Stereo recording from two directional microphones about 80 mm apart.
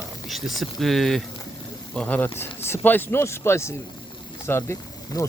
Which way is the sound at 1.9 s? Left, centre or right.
Centre.